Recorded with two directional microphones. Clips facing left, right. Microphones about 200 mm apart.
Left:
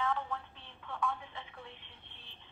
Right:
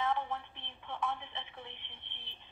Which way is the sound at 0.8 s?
20° right (ahead or behind).